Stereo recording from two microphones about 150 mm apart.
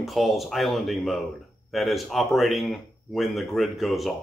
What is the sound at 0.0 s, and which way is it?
Speech, centre (ahead or behind).